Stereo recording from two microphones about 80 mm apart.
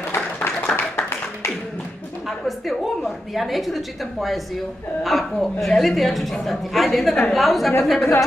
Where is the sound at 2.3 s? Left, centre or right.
Centre.